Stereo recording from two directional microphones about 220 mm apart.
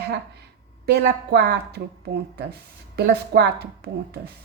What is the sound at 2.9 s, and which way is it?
Speech, 45° right (ahead or behind).